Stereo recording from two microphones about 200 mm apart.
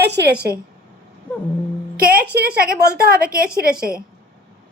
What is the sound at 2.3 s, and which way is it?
A woman's voice, 55° right (ahead or behind).